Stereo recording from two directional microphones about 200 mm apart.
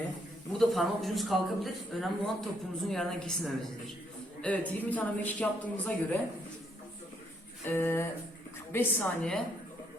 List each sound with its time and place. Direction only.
0.6 s speech: centre (ahead or behind)
7.7 s speech: 10° left (ahead or behind)